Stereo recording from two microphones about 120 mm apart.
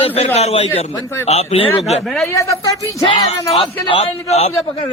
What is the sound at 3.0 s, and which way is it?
Speech, 50° left (ahead or behind).